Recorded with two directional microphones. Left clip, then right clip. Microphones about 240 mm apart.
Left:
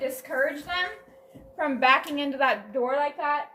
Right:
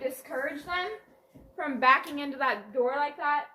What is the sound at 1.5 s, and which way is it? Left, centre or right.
A woman's voice, right.